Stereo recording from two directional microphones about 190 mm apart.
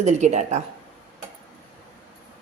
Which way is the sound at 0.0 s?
35° right (ahead or behind).